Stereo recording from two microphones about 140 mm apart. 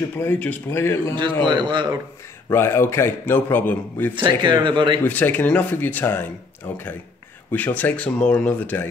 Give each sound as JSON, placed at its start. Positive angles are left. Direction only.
{"t": 0.2, "sound": "a man's voice", "side_deg": 15}
{"t": 1.4, "sound": "speech", "side_deg": -35}
{"t": 2.5, "sound": "a man's voice", "side_deg": 20}
{"t": 4.1, "sound": "speech", "side_deg": -35}
{"t": 5.0, "sound": "a man's voice", "side_deg": 15}
{"t": 7.5, "sound": "a man's voice", "side_deg": 10}